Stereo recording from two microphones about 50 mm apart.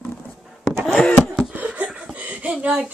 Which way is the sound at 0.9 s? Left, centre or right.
Centre.